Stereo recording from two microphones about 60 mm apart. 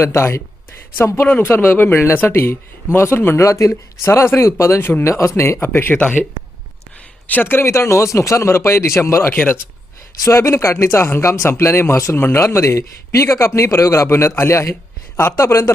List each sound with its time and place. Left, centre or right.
0.0 s speech: left
0.9 s speech: left
2.3 s speech: left
3.3 s speech: left
4.0 s speech: left
5.0 s speech: left
7.3 s speech: left
9.3 s speech: left
10.2 s speech: left